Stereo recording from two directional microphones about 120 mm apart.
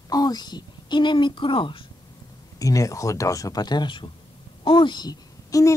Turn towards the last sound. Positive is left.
turn(degrees=25)  # may be behind; listen again after turning